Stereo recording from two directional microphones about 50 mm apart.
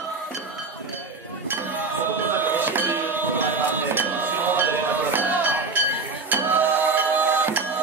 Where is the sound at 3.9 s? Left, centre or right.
Right.